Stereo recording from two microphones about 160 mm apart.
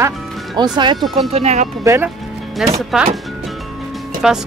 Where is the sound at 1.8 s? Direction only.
20° right (ahead or behind).